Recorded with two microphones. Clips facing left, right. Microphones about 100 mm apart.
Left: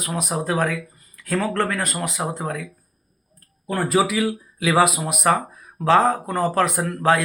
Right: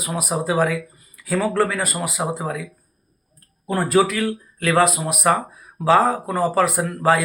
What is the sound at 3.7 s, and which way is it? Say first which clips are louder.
Speech: right 2 dB; 5° right (ahead or behind).